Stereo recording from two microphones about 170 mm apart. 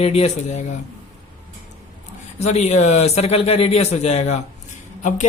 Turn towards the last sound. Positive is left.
turn(degrees=45)  # may be behind; listen again after turning